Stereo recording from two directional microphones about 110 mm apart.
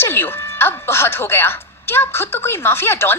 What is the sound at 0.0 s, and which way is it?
Speech, 20° left (ahead or behind).